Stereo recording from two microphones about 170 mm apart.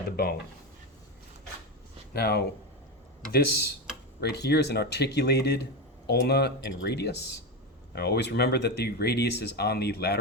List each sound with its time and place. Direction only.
2.1 s speech: 70° left (ahead or behind)